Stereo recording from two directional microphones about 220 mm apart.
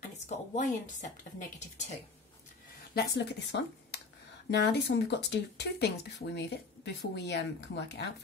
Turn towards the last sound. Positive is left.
turn(degrees=50)  # may be behind; listen again after turning